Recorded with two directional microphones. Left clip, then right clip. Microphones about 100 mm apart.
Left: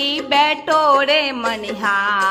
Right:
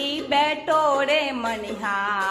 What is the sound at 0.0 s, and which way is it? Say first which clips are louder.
Female singing: left 6 dB; 25° left (ahead or behind).